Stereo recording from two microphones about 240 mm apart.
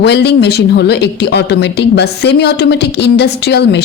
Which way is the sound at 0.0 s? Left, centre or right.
Left.